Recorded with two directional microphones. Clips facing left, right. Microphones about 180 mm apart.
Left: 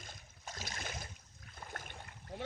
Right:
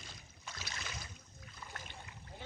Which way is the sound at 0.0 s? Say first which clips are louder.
Left 2 dB; 45° left (ahead or behind).